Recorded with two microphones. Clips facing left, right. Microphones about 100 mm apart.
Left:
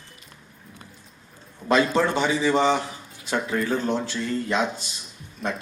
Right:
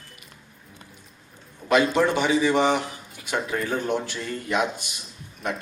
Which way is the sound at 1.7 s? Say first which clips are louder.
Even; 15° right (ahead or behind).